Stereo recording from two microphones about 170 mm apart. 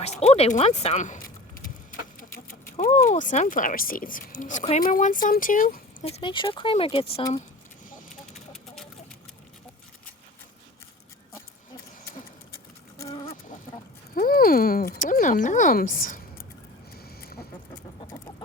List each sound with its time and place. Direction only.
0.0 s speech: 40° left (ahead or behind)
2.5 s speech: 50° left (ahead or behind)
6.1 s speech: 30° left (ahead or behind)
8.1 s a sound: centre (ahead or behind)
13.1 s chicken: 40° left (ahead or behind)
14.2 s speech: 60° left (ahead or behind)